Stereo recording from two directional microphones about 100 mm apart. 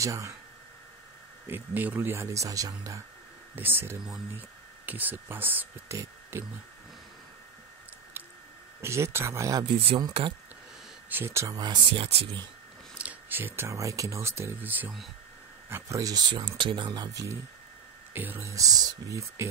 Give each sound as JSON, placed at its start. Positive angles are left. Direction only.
{"t": 0.0, "sound": "speech", "side_deg": -30}
{"t": 1.5, "sound": "speech", "side_deg": -20}
{"t": 3.5, "sound": "speech", "side_deg": -20}
{"t": 5.9, "sound": "speech", "side_deg": -30}
{"t": 8.8, "sound": "speech", "side_deg": -25}
{"t": 11.1, "sound": "speech", "side_deg": -20}
{"t": 11.9, "sound": "speech", "side_deg": -70}
{"t": 12.9, "sound": "speech", "side_deg": -15}
{"t": 15.7, "sound": "speech", "side_deg": -35}
{"t": 16.3, "sound": "speech", "side_deg": -60}
{"t": 18.1, "sound": "speech", "side_deg": -20}
{"t": 18.5, "sound": "speech", "side_deg": -35}